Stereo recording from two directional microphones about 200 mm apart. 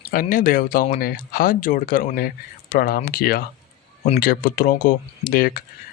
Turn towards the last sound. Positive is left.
turn(degrees=45)  # may be behind; listen again after turning